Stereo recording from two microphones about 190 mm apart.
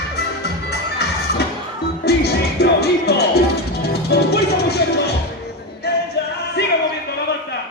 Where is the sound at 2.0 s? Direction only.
60° left (ahead or behind).